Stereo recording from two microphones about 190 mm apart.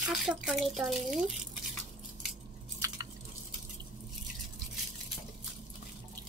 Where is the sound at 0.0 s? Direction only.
Centre (ahead or behind).